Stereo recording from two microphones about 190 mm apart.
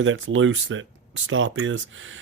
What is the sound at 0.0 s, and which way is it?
Speech, 90° right.